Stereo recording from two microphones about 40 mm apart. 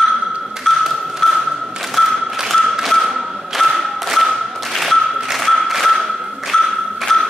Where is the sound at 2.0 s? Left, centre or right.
Centre.